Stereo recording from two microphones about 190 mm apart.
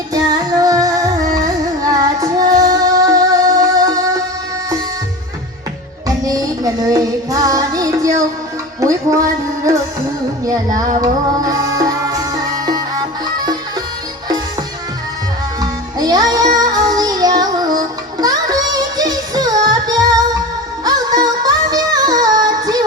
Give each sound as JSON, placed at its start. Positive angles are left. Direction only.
{"t": 0.1, "sound": "music", "side_deg": -20}
{"t": 6.1, "sound": "music", "side_deg": -20}
{"t": 10.4, "sound": "child singing", "side_deg": -20}
{"t": 11.0, "sound": "music", "side_deg": -20}
{"t": 15.6, "sound": "music", "side_deg": -20}